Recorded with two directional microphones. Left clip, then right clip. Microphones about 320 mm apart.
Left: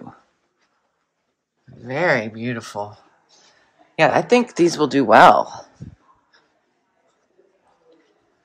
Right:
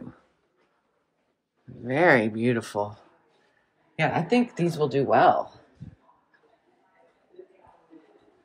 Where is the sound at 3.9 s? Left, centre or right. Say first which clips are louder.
Left 9 dB; centre.